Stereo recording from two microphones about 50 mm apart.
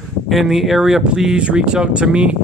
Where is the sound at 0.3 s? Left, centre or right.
Centre.